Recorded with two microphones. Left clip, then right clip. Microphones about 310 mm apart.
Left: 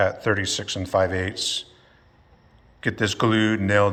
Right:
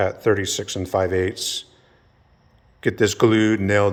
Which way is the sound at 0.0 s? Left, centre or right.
Centre.